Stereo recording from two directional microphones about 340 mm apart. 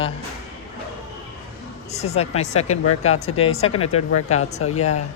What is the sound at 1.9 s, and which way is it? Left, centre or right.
A woman's voice, centre.